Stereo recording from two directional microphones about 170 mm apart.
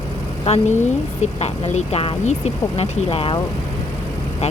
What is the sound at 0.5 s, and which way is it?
Speech, 40° left (ahead or behind).